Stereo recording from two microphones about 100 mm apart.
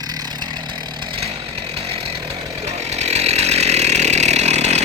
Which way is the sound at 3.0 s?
90° right.